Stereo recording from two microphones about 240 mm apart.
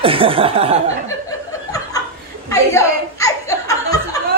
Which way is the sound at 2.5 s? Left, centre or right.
Centre.